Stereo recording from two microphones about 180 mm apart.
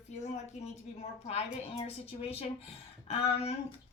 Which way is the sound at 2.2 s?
35° left (ahead or behind).